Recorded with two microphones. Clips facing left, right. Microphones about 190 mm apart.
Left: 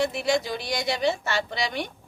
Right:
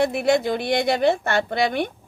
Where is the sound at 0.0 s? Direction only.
55° right (ahead or behind).